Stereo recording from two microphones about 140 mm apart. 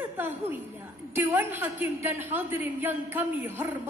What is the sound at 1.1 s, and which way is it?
A woman's voice, 15° right (ahead or behind).